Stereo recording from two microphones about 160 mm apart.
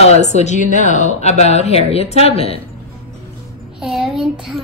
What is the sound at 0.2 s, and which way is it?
Speech, 45° left (ahead or behind).